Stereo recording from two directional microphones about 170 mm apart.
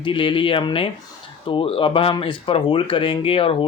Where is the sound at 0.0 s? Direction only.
30° left (ahead or behind).